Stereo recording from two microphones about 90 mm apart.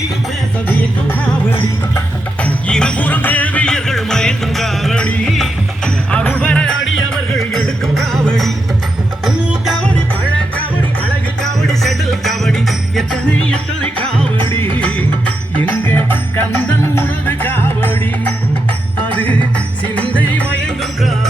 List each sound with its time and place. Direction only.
0.7 s music: 20° left (ahead or behind)
2.4 s music: 10° left (ahead or behind)
11.6 s music: 5° left (ahead or behind)